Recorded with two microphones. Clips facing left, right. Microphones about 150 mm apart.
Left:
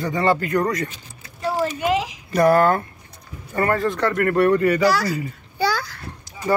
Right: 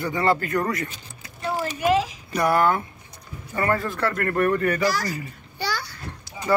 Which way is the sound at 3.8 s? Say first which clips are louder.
Left 5 dB; 25° left (ahead or behind).